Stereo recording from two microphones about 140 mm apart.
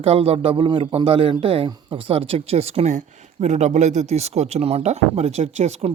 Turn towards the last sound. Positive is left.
turn(degrees=-55)  # may be behind; listen again after turning